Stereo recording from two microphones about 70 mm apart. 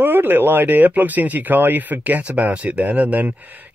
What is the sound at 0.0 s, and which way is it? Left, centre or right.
Speech, right.